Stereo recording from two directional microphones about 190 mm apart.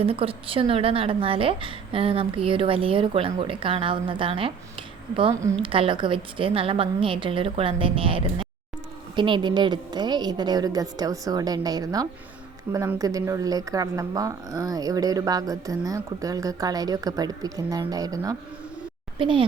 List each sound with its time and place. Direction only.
0.0 s speech: 30° right (ahead or behind)
5.3 s speech: 15° right (ahead or behind)
5.6 s speech: 25° right (ahead or behind)